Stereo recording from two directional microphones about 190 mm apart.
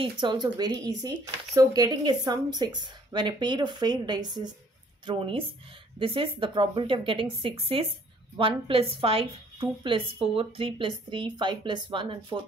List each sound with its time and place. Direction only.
0.0 s a woman's voice: 25° right (ahead or behind)